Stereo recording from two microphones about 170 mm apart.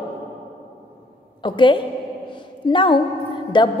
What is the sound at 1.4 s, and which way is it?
A woman's voice, 30° left (ahead or behind).